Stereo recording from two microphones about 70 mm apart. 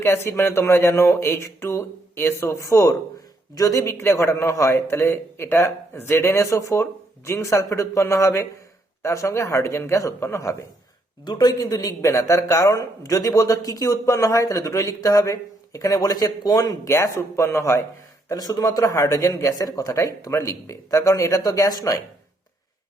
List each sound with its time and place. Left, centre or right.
0.0 s a man's voice: left
11.3 s speech: left
18.3 s speech: left